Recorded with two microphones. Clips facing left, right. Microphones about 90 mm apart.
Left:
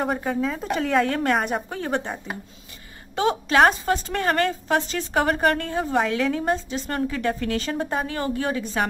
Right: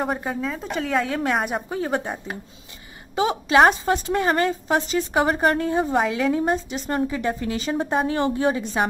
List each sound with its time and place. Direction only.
0.0 s a woman's voice: centre (ahead or behind)
3.2 s a woman's voice: 10° right (ahead or behind)
8.1 s a woman's voice: 20° right (ahead or behind)